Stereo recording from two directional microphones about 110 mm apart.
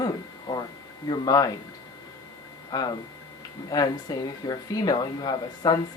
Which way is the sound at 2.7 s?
35° left (ahead or behind).